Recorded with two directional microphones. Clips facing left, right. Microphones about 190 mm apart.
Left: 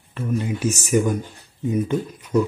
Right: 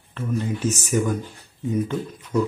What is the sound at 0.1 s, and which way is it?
Speech, 15° left (ahead or behind).